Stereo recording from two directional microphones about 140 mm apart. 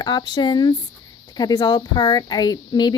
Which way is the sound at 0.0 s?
30° left (ahead or behind).